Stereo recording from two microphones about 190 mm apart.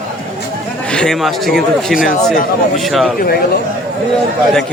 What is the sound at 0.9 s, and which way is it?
Speech, centre (ahead or behind).